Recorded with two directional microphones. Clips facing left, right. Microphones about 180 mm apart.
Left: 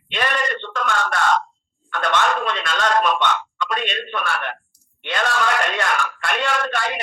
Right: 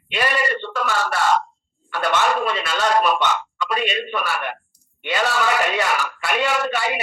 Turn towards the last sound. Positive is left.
turn(degrees=-5)  # may be behind; listen again after turning